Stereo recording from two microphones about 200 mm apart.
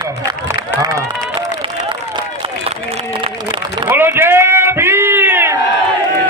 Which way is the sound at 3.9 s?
10° right (ahead or behind).